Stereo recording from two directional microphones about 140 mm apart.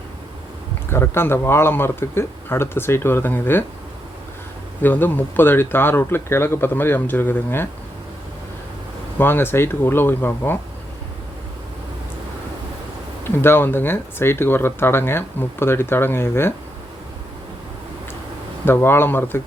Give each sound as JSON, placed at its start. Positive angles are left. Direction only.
{"t": 0.9, "sound": "speech", "side_deg": 15}
{"t": 4.8, "sound": "speech", "side_deg": 15}
{"t": 9.1, "sound": "speech", "side_deg": 15}
{"t": 13.2, "sound": "speech", "side_deg": 15}
{"t": 18.6, "sound": "speech", "side_deg": 15}